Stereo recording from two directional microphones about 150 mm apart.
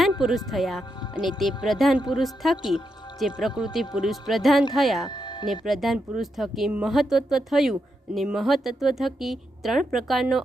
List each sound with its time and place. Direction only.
0.2 s speech: centre (ahead or behind)
5.0 s music: 30° left (ahead or behind)
5.5 s speech: centre (ahead or behind)